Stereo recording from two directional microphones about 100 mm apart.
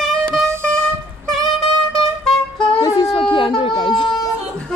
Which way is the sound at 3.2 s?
55° left (ahead or behind).